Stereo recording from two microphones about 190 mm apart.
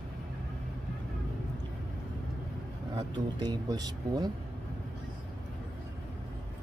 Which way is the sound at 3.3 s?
20° right (ahead or behind).